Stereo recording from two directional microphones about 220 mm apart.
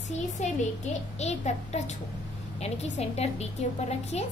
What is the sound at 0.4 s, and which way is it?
A woman's voice, 35° left (ahead or behind).